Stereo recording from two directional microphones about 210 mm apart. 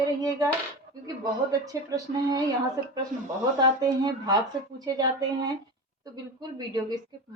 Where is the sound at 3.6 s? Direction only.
20° right (ahead or behind).